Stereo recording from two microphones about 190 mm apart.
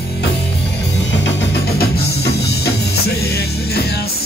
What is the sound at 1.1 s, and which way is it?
Music, 70° left (ahead or behind).